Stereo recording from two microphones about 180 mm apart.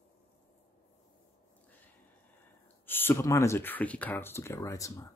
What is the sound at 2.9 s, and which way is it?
Speech, 10° left (ahead or behind).